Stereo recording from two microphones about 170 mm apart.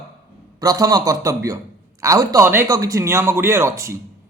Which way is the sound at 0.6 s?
20° right (ahead or behind).